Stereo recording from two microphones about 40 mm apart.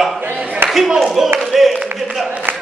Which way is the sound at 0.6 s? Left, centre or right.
Right.